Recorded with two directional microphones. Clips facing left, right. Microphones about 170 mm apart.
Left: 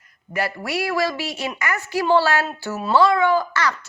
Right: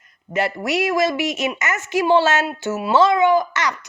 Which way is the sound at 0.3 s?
20° right (ahead or behind).